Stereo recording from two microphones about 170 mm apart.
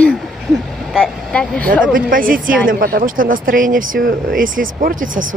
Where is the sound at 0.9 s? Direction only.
5° left (ahead or behind).